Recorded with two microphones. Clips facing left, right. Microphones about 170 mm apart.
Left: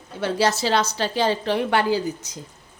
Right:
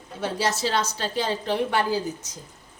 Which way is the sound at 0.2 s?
75° left (ahead or behind).